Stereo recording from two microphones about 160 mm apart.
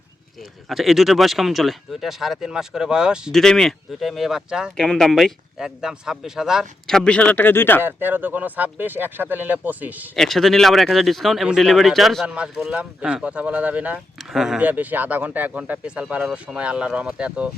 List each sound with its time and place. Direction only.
0.7 s speech: centre (ahead or behind)
7.8 s speech: 15° right (ahead or behind)
10.2 s speech: centre (ahead or behind)